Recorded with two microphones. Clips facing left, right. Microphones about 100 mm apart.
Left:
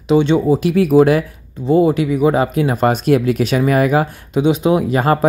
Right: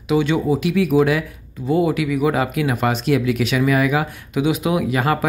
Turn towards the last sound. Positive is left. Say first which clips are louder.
# left 4 dB
turn(degrees=35)  # may be behind; listen again after turning